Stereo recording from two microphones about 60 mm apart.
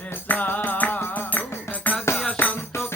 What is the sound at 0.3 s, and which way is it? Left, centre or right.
Music, left.